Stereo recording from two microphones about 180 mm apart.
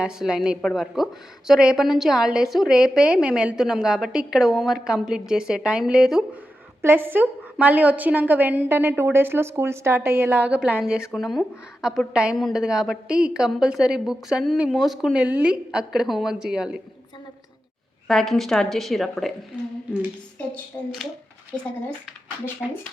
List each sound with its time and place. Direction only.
0.0 s a woman's voice: 5° right (ahead or behind)
18.1 s a woman's voice: centre (ahead or behind)
22.6 s a woman's voice: 5° right (ahead or behind)